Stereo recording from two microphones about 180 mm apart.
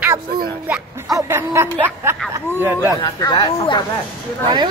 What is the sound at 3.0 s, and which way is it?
Speech, 25° left (ahead or behind).